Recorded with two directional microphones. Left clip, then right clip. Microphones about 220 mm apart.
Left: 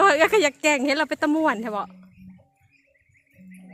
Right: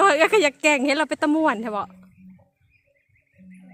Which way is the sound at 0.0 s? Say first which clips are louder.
Right 1 dB; 5° right (ahead or behind).